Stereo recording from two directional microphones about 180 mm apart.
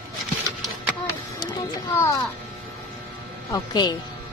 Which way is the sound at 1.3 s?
25° left (ahead or behind).